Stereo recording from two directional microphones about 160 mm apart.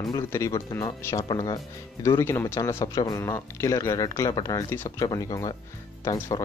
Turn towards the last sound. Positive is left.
turn(degrees=25)  # may be behind; listen again after turning